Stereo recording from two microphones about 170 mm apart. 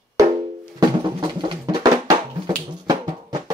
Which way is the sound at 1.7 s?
25° right (ahead or behind).